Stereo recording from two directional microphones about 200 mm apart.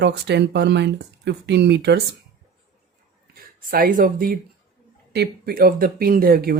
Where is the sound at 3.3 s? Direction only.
45° right (ahead or behind).